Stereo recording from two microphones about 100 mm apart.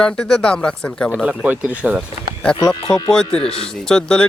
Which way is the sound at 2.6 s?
40° left (ahead or behind).